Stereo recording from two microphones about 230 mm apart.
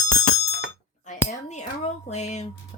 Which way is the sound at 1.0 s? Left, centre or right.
Left.